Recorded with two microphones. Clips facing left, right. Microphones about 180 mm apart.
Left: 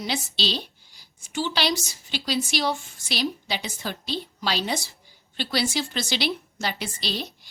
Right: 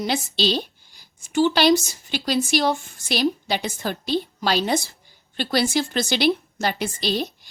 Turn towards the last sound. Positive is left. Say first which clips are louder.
# right 7 dB
turn(degrees=-50)  # may be behind; listen again after turning